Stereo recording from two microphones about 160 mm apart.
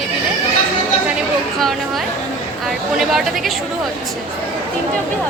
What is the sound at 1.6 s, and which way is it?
Speech, centre (ahead or behind).